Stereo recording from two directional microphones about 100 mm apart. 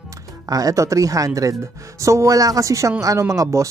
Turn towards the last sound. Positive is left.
turn(degrees=-30)  # may be behind; listen again after turning